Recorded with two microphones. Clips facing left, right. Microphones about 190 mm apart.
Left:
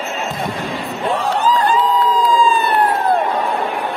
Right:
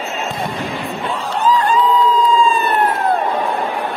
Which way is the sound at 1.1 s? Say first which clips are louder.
Left 6 dB; 70° left (ahead or behind).